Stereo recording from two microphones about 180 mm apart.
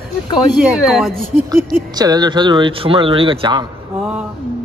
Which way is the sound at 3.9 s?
5° right (ahead or behind).